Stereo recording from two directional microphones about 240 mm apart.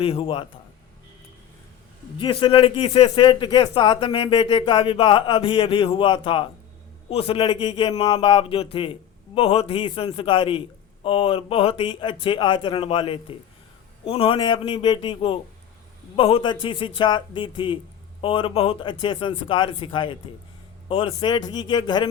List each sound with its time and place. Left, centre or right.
0.0 s a man's voice: left
2.1 s a man's voice: left